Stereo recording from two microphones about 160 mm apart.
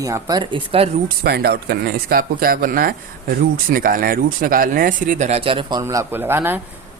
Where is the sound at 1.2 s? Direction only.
80° right; by 5.8 s 35° right (ahead or behind).